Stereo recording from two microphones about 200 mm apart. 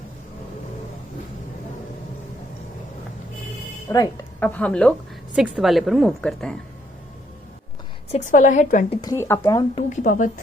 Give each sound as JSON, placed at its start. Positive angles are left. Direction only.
{"t": 3.8, "sound": "speech", "side_deg": 20}
{"t": 4.4, "sound": "a woman's voice", "side_deg": 5}
{"t": 8.1, "sound": "a woman's voice", "side_deg": 40}
{"t": 9.0, "sound": "speech", "side_deg": 15}
{"t": 9.7, "sound": "a woman's voice", "side_deg": 40}